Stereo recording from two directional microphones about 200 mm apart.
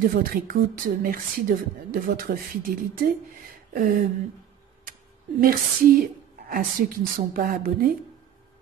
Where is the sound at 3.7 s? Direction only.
45° right (ahead or behind).